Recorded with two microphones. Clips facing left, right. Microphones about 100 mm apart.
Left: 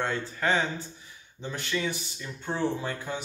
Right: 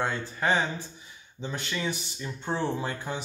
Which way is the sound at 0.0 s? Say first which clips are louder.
Even; 10° right (ahead or behind).